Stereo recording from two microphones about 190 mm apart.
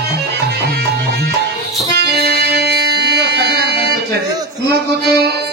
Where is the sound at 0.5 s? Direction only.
60° right (ahead or behind).